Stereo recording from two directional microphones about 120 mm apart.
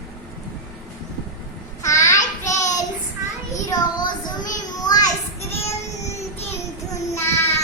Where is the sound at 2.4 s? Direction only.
90° left.